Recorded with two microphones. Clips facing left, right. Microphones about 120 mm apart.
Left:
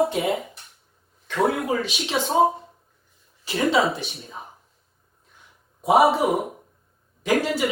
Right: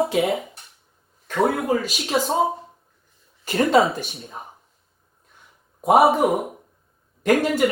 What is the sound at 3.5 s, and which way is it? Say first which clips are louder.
Speech: right 6 dB; 50° right (ahead or behind).